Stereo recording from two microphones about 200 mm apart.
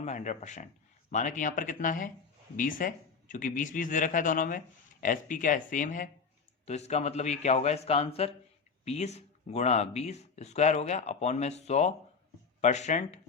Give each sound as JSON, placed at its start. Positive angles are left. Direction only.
{"t": 0.0, "sound": "speech", "side_deg": 35}